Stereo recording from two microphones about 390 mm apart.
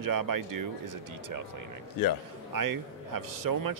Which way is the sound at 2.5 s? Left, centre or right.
Right.